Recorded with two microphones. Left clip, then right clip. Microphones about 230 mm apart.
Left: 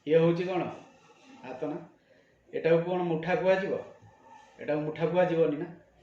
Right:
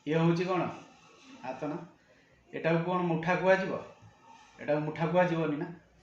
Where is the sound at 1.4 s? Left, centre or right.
Right.